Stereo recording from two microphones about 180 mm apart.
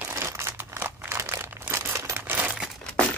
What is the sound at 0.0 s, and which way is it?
Crumpling, 15° right (ahead or behind).